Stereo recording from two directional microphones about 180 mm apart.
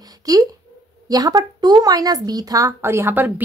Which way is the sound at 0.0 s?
20° right (ahead or behind).